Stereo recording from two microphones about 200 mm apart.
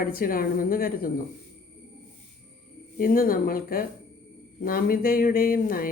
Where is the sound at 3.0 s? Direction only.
45° left (ahead or behind).